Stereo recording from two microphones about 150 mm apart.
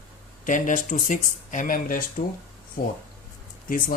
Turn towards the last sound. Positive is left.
turn(degrees=70)  # may be behind; listen again after turning